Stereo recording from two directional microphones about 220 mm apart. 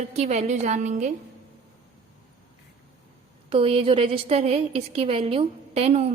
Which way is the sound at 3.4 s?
25° right (ahead or behind).